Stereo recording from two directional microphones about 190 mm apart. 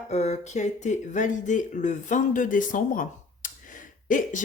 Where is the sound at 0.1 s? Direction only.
35° left (ahead or behind).